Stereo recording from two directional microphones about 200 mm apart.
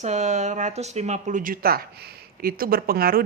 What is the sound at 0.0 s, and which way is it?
Speech, 35° right (ahead or behind).